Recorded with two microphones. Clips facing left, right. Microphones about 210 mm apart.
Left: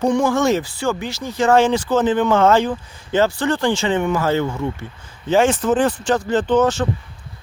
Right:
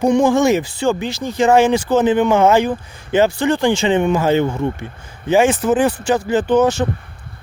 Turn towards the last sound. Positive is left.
turn(degrees=-10)  # may be behind; listen again after turning